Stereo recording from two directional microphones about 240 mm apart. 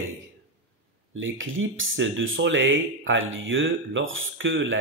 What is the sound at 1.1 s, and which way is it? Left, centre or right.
Speech, right.